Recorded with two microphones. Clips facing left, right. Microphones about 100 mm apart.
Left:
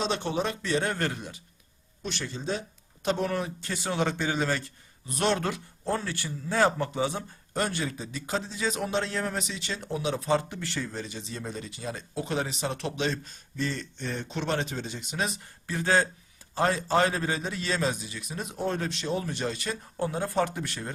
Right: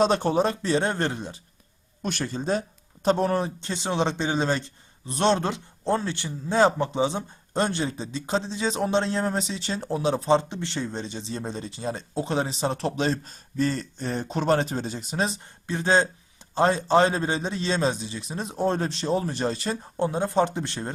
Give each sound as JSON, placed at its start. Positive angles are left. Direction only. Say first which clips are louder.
{"t": 0.0, "sound": "speech", "louder": "right 7 dB", "side_deg": -45}
{"t": 2.0, "sound": "speech", "louder": "right 6 dB", "side_deg": -50}